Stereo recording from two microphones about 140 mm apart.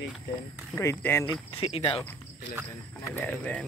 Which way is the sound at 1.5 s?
40° left (ahead or behind).